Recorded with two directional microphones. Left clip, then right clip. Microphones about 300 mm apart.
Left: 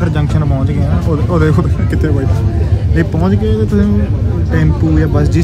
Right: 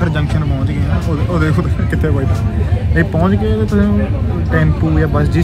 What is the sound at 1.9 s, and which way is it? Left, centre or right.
Speech, centre.